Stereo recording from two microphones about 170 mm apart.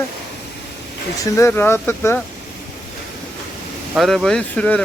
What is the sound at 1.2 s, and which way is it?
Speech, 15° left (ahead or behind).